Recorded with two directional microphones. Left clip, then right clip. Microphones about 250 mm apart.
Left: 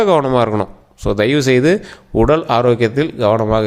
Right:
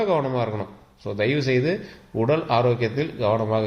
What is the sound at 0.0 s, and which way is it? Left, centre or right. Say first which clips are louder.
A man's voice: left 10 dB; left.